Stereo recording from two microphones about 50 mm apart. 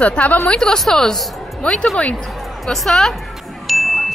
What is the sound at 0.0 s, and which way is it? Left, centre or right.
Speech, left.